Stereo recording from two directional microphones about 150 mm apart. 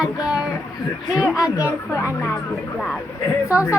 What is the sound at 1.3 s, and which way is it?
Speech, 25° left (ahead or behind).